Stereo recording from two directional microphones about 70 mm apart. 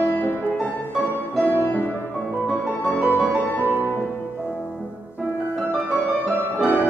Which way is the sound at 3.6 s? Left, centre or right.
Right.